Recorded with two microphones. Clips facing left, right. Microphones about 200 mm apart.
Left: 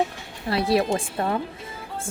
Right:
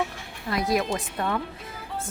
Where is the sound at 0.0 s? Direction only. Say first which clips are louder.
Left 4 dB; 30° left (ahead or behind).